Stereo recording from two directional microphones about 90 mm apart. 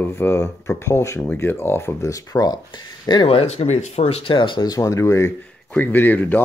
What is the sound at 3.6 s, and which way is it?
Speech, 90° left.